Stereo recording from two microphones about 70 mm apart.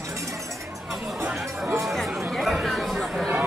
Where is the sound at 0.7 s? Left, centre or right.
Centre.